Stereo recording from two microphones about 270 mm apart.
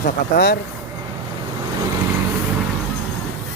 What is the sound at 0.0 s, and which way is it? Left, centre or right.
Speech, left.